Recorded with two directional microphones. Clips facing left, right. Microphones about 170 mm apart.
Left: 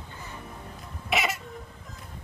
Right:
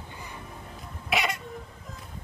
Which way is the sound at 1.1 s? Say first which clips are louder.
Even; centre (ahead or behind).